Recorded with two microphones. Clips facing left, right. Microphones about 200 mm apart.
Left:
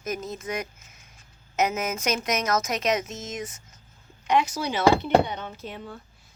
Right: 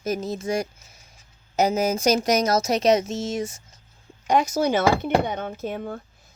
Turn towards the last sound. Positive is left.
turn(degrees=-50)  # may be behind; listen again after turning